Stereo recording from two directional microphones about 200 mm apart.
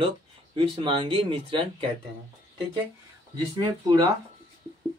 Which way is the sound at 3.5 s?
20° right (ahead or behind).